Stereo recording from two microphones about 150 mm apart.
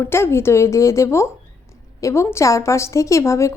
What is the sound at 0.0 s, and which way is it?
A woman's voice, 15° left (ahead or behind).